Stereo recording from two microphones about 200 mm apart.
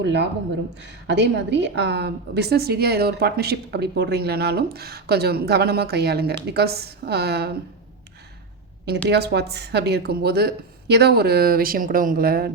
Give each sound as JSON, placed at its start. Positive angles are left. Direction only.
{"t": 0.0, "sound": "a woman's voice", "side_deg": -60}
{"t": 9.0, "sound": "a woman's voice", "side_deg": -55}